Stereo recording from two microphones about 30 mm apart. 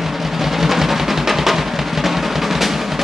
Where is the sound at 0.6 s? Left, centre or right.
Centre.